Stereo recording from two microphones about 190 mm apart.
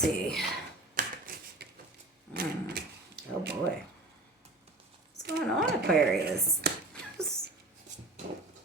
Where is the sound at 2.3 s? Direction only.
55° right (ahead or behind).